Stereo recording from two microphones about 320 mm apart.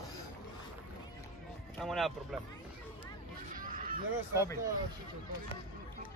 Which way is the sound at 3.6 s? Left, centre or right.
Right.